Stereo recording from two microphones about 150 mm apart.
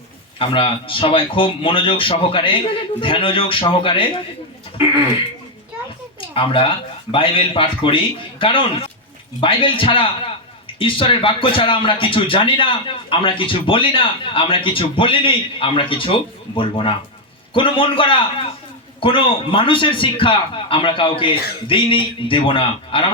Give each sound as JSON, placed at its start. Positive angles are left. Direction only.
{"t": 0.3, "sound": "a man's voice", "side_deg": 35}
{"t": 6.1, "sound": "a man's voice", "side_deg": 35}